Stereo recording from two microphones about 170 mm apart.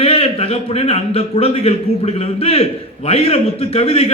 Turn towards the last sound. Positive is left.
turn(degrees=35)  # may be behind; listen again after turning